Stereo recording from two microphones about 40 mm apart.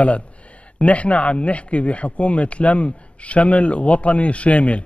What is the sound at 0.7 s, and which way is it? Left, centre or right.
Speech, left.